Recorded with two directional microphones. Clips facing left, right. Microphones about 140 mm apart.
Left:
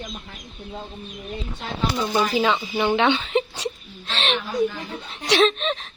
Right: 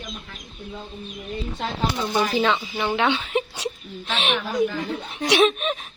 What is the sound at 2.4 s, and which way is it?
A woman's voice, 5° left (ahead or behind).